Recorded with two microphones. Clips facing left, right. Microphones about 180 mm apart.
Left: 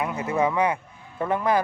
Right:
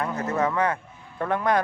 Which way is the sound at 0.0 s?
10° left (ahead or behind).